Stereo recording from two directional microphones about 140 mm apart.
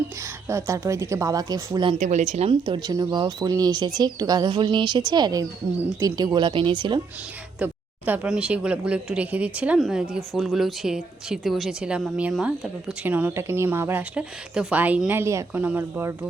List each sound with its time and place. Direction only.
0.2 s a woman's voice: 20° right (ahead or behind)
2.0 s speech: 55° right (ahead or behind)
2.5 s speech: 35° right (ahead or behind)
7.6 s speech: 10° right (ahead or behind)
15.2 s speech: 20° right (ahead or behind)